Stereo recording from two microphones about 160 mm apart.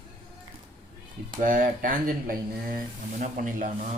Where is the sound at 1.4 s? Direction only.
55° right (ahead or behind).